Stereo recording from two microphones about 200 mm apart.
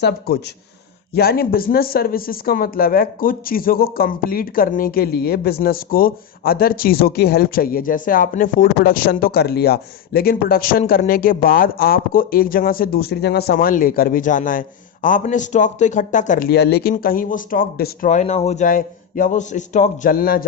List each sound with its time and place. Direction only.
0.0 s a man's voice: 55° left (ahead or behind); by 16.5 s 40° left (ahead or behind)
16.5 s a man's voice: 55° left (ahead or behind)